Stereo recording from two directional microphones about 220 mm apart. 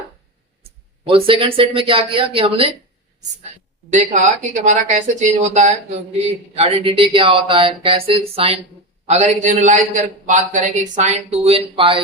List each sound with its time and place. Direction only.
1.0 s speech: 25° right (ahead or behind)
3.9 s a man's voice: 35° right (ahead or behind)